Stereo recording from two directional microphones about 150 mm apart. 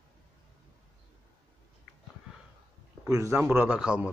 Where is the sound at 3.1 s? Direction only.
15° right (ahead or behind).